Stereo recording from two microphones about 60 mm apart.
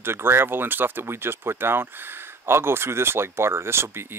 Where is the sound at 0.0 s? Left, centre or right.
Right.